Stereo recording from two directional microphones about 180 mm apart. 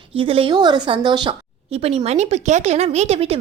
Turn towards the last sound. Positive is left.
turn(degrees=-35)  # may be behind; listen again after turning